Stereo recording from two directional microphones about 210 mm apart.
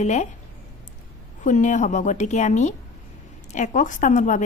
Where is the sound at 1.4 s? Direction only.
35° left (ahead or behind).